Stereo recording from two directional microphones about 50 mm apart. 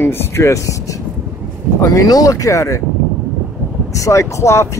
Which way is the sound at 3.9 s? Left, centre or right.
Left.